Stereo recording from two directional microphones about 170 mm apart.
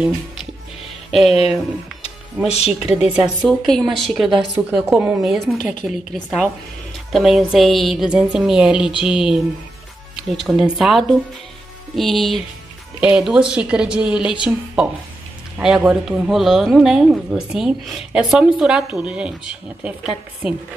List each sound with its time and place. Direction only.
2.0 s music: 40° left (ahead or behind)
2.8 s speech: 5° right (ahead or behind)